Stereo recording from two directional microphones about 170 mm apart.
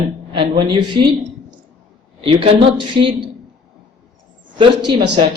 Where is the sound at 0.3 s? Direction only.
30° right (ahead or behind).